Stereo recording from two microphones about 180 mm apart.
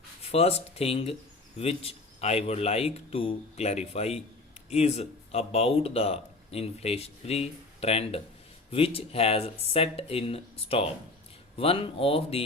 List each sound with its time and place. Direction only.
0.2 s speech: 35° left (ahead or behind)